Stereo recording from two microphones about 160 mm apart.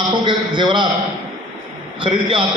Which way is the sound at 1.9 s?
30° right (ahead or behind).